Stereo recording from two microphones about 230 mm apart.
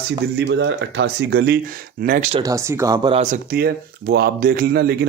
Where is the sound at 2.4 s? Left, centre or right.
Centre.